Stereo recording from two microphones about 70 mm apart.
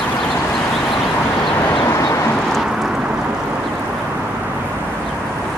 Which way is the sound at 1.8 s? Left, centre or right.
Left.